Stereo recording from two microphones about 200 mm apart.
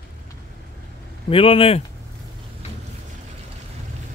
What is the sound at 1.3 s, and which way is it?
Speech, 25° left (ahead or behind).